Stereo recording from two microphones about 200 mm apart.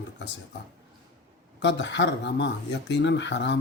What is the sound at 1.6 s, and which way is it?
Speech, 60° left (ahead or behind).